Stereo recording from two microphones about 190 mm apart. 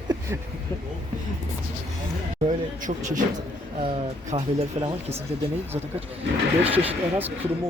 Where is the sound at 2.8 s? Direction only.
40° right (ahead or behind).